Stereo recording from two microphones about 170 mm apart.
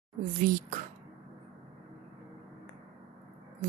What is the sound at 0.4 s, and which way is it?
Speech, 50° right (ahead or behind).